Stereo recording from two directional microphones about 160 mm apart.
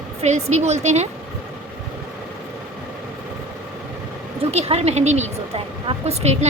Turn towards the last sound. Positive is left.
turn(degrees=-40)  # may be behind; listen again after turning